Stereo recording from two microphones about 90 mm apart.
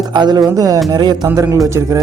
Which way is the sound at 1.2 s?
35° right (ahead or behind).